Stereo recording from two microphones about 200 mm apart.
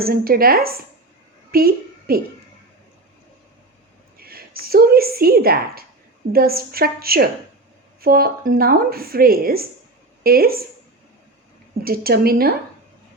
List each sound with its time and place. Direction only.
0.0 s a woman's voice: 45° right (ahead or behind)
4.2 s a woman's voice: 50° right (ahead or behind)
11.8 s speech: 50° right (ahead or behind)